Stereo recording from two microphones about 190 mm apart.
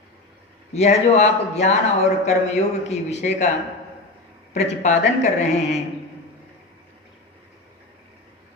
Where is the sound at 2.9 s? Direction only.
35° left (ahead or behind).